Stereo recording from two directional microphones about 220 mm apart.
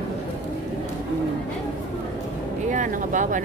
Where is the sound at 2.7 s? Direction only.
35° right (ahead or behind).